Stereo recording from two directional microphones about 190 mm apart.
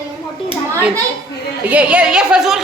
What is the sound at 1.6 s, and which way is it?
Speech, 5° right (ahead or behind).